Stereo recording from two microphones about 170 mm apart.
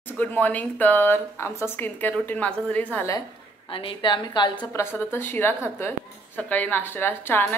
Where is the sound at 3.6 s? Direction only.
30° left (ahead or behind).